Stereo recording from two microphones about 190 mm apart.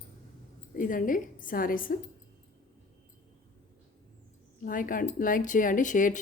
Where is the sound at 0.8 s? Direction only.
45° left (ahead or behind).